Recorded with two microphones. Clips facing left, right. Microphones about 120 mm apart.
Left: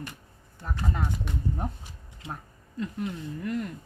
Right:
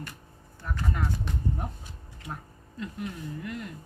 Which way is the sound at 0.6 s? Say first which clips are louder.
Even; 30° left (ahead or behind).